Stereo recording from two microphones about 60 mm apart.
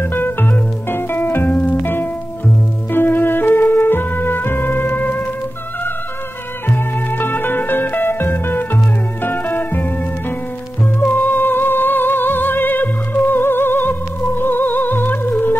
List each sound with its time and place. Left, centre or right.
0.0 s music: left
6.7 s music: left
11.1 s music: left